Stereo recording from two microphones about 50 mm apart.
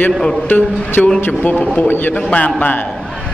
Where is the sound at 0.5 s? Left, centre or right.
Left.